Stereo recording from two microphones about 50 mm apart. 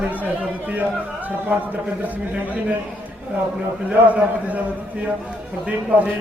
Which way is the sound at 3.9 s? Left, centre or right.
Right.